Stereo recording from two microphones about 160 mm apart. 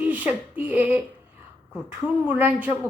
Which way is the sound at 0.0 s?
10° right (ahead or behind).